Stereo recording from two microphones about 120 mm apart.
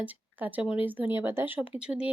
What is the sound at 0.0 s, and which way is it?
Speech, 15° right (ahead or behind).